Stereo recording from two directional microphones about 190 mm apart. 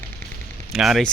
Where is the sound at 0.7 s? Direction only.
Centre (ahead or behind).